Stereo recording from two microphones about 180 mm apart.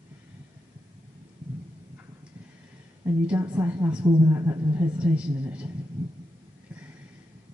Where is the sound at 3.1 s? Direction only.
15° right (ahead or behind).